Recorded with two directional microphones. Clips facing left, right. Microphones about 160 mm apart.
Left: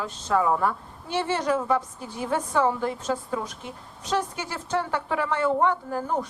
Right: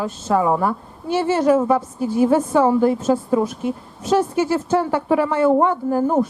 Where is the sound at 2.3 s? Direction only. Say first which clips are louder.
Right 4 dB; 25° right (ahead or behind).